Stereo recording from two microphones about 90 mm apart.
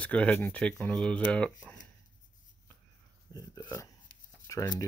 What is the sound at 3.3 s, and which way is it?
Speech, 45° left (ahead or behind).